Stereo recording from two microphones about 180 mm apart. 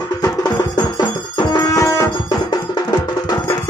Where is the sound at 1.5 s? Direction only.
20° left (ahead or behind).